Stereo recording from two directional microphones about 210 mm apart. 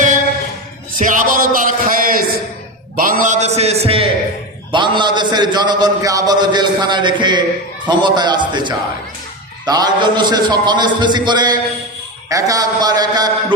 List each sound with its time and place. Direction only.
0.9 s music: 40° right (ahead or behind)
2.9 s a man's voice: 40° right (ahead or behind); by 13.3 s 20° right (ahead or behind)